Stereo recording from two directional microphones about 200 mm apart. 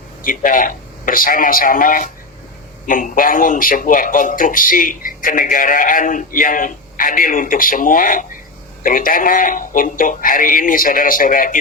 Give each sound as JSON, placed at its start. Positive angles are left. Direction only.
{"t": 0.2, "sound": "a man's voice", "side_deg": 40}